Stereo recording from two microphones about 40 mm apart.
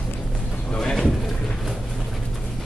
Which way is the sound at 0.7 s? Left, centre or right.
Centre.